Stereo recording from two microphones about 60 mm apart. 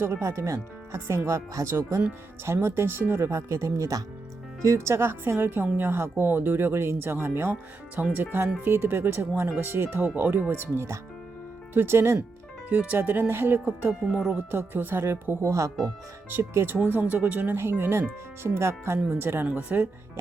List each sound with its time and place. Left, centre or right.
0.0 s speech: right
2.4 s speech: right
4.6 s speech: right
7.9 s speech: right
10.0 s speech: right
10.5 s speech: right
11.7 s speech: right
12.6 s speech: right
14.1 s speech: centre
14.3 s speech: right
16.4 s speech: right
16.7 s speech: right
17.5 s speech: right
19.5 s speech: right